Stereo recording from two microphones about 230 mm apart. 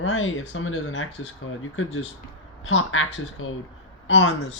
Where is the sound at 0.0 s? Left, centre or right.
Left.